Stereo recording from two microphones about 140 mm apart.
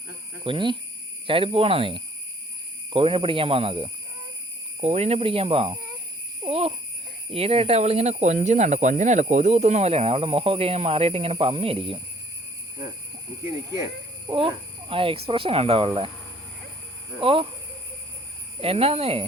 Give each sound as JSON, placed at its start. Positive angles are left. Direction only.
{"t": 0.4, "sound": "speech", "side_deg": -35}
{"t": 6.4, "sound": "a sound", "side_deg": -45}
{"t": 7.3, "sound": "speech", "side_deg": -45}
{"t": 13.8, "sound": "speech", "side_deg": -35}
{"t": 17.2, "sound": "speech", "side_deg": -40}
{"t": 18.6, "sound": "speech", "side_deg": -45}